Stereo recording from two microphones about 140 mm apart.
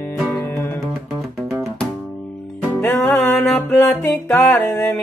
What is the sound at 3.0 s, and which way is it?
Music, 15° left (ahead or behind).